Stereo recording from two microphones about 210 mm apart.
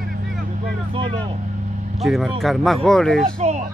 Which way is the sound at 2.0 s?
Centre (ahead or behind).